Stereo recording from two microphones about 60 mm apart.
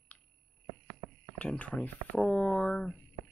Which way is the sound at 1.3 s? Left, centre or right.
Left.